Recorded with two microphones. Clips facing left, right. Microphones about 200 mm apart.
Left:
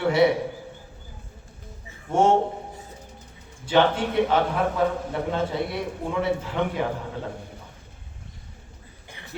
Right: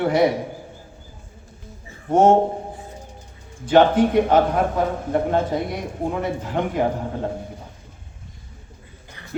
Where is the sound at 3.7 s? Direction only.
45° right (ahead or behind).